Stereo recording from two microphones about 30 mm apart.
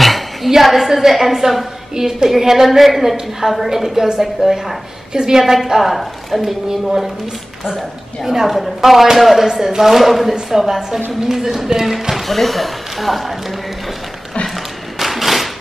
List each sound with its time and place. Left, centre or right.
0.0 s a sound: centre
0.6 s a woman's voice: centre
5.1 s a woman's voice: right
5.4 s a woman's voice: centre
8.5 s speech: centre
9.5 s a woman's voice: centre
12.1 s speech: centre
14.5 s thump: centre